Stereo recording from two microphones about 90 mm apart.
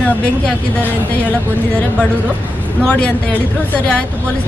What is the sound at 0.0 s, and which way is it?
Speech, 15° left (ahead or behind).